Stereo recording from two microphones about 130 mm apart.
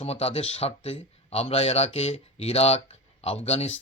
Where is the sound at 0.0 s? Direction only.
50° left (ahead or behind).